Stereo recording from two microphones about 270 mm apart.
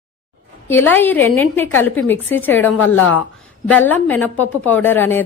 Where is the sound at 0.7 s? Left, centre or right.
Centre.